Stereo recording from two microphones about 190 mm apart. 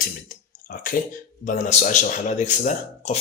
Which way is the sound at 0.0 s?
45° left (ahead or behind).